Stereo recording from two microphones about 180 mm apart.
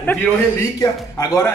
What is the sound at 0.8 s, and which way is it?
Speech, 20° left (ahead or behind).